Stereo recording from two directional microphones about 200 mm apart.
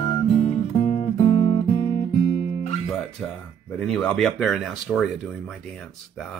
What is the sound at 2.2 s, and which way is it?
Music, 35° left (ahead or behind).